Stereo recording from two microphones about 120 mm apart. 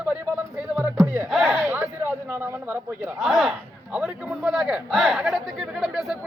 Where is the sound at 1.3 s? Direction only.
Centre (ahead or behind).